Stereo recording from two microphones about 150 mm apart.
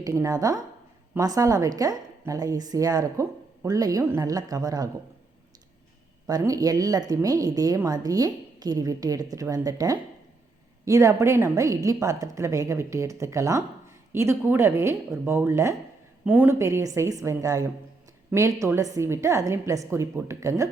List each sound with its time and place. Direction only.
0.0 s a woman's voice: 20° right (ahead or behind)
6.2 s a woman's voice: 25° right (ahead or behind)